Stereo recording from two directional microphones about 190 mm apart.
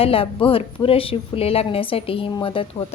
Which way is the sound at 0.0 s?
30° left (ahead or behind).